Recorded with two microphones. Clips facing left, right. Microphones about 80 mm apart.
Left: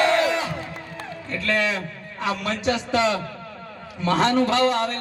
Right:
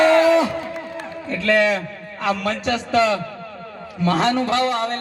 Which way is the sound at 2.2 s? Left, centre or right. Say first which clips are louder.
Right 4 dB; right.